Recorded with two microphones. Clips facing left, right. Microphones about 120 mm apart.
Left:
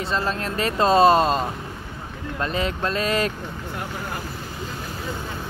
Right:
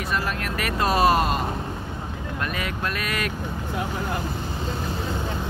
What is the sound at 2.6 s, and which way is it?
Speech, 30° left (ahead or behind).